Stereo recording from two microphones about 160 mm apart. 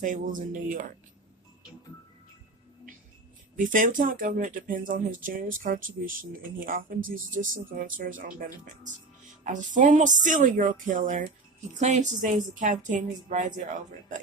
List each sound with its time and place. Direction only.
0.0 s speech: 55° right (ahead or behind)
3.6 s speech: 55° right (ahead or behind)